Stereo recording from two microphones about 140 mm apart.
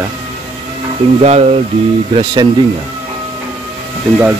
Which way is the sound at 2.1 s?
40° right (ahead or behind).